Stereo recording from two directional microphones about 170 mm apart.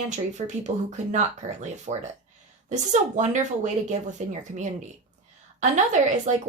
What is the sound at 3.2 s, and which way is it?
Speech, 45° right (ahead or behind).